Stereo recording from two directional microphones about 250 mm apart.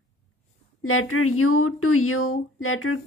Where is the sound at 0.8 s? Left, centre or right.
Left.